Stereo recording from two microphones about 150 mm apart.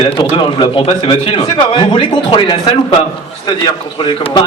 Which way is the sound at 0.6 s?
35° left (ahead or behind).